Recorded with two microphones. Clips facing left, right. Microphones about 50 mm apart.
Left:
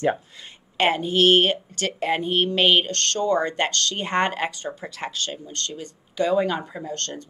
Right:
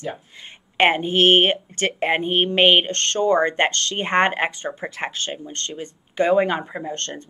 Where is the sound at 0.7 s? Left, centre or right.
Right.